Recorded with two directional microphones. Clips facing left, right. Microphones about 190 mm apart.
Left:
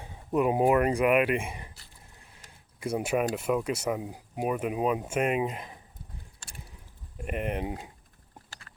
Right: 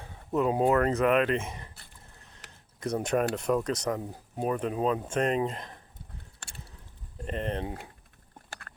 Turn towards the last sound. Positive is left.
turn(degrees=15)  # may be behind; listen again after turning